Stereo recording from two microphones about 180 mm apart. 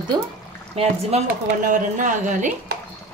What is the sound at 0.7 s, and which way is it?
Speech, 40° right (ahead or behind).